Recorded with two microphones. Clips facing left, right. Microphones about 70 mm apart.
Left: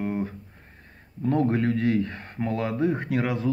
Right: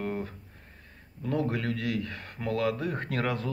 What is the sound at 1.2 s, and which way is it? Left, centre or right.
Speech, left.